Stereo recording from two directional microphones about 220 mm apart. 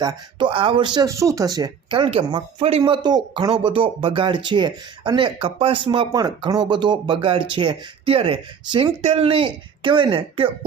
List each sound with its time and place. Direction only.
0.0 s speech: 20° right (ahead or behind)